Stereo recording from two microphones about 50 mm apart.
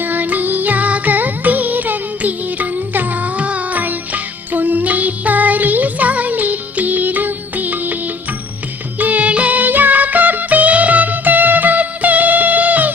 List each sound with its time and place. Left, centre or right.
0.0 s music: right